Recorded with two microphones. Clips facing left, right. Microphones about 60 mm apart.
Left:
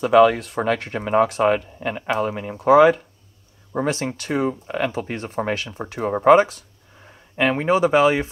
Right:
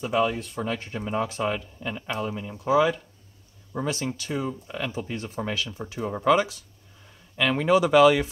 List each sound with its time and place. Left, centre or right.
0.0 s speech: left